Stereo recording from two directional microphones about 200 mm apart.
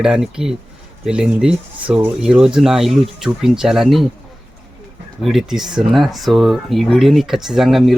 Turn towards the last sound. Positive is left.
turn(degrees=0)  # may be behind; listen again after turning